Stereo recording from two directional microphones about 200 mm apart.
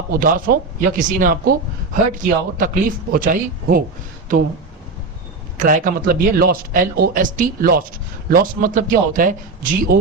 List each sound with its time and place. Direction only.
0.1 s speech: 45° right (ahead or behind)
5.5 s speech: 40° right (ahead or behind)